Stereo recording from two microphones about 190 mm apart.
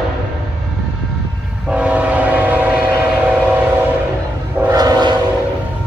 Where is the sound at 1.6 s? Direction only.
5° right (ahead or behind).